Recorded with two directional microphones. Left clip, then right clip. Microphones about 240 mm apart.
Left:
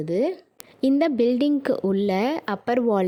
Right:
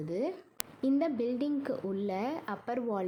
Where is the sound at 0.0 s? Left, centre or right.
Left.